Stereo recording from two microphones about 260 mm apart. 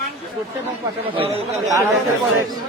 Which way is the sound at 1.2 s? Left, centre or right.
Right.